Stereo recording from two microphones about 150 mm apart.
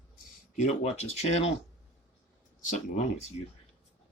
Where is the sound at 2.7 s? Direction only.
55° left (ahead or behind).